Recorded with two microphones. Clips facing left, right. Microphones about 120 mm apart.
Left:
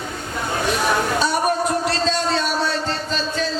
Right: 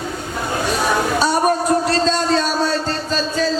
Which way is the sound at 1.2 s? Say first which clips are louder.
Right 3 dB; 40° right (ahead or behind).